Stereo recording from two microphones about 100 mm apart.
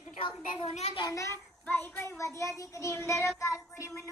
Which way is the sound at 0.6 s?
90° left.